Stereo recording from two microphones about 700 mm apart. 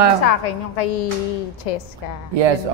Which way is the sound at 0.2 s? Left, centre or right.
Left.